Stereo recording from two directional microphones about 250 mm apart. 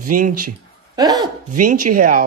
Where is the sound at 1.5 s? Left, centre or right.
Right.